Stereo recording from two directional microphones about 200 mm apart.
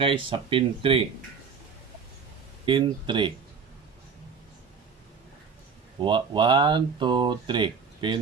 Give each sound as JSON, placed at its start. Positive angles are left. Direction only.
{"t": 0.0, "sound": "speech", "side_deg": -25}
{"t": 2.6, "sound": "speech", "side_deg": -25}
{"t": 5.9, "sound": "speech", "side_deg": -25}